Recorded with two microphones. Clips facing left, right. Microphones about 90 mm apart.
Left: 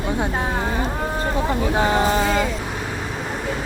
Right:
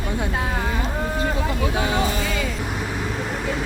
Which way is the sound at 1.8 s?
40° left (ahead or behind).